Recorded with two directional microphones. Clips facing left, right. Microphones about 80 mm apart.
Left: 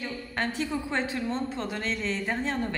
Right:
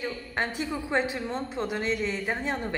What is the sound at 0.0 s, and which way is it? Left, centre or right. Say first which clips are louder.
A woman's voice: right 1 dB; right.